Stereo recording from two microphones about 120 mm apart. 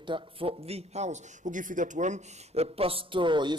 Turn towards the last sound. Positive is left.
turn(degrees=-40)  # may be behind; listen again after turning